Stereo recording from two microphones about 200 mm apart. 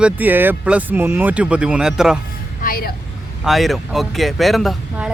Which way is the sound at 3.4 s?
Centre (ahead or behind).